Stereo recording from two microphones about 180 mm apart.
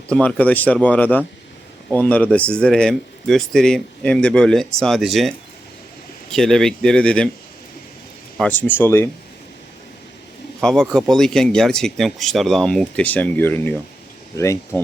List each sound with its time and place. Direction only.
0.1 s a man's voice: 5° left (ahead or behind)
6.3 s a man's voice: 5° left (ahead or behind)
8.4 s speech: 10° left (ahead or behind)
10.6 s a man's voice: 5° left (ahead or behind)